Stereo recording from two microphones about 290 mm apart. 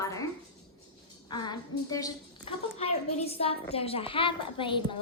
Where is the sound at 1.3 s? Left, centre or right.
Centre.